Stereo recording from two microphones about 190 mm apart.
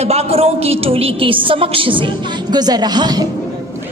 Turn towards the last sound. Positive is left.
turn(degrees=-20)  # may be behind; listen again after turning